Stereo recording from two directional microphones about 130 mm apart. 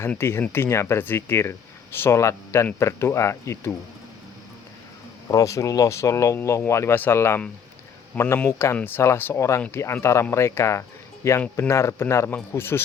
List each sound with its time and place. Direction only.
0.0 s speech: 20° left (ahead or behind)
5.3 s speech: 25° left (ahead or behind)